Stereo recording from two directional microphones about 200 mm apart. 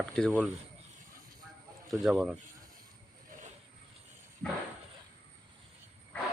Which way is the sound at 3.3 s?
40° right (ahead or behind).